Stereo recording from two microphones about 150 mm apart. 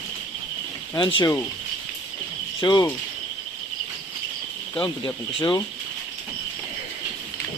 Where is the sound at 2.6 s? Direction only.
25° left (ahead or behind).